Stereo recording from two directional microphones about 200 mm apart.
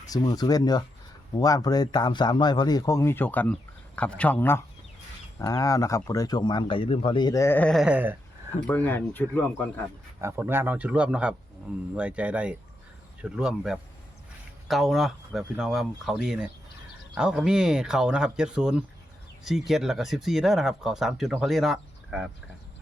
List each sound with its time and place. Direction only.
0.1 s speech: 20° left (ahead or behind); by 8.1 s 5° right (ahead or behind)
8.6 s speech: 10° left (ahead or behind)
10.2 s speech: 15° right (ahead or behind)